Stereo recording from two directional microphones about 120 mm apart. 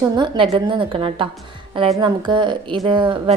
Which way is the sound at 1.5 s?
45° right (ahead or behind).